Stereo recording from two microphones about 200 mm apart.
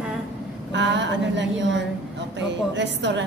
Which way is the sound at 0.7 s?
65° right (ahead or behind).